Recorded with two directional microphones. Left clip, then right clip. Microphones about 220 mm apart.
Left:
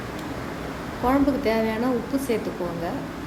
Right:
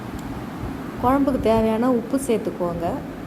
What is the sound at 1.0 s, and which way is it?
A woman's voice, 25° right (ahead or behind).